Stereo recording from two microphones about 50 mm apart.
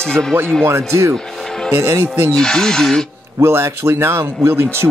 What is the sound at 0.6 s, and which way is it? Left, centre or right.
A man's voice, right.